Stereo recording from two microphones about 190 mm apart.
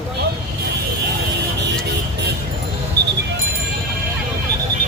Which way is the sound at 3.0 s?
60° right (ahead or behind).